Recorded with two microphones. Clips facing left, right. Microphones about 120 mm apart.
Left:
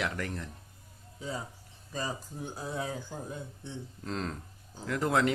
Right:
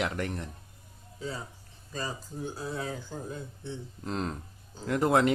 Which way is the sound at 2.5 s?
15° left (ahead or behind).